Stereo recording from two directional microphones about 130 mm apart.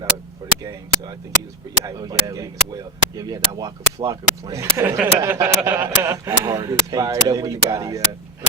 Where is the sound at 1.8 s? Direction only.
30° right (ahead or behind).